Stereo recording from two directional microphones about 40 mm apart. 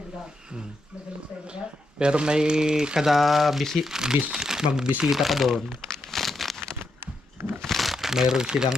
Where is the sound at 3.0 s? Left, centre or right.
Centre.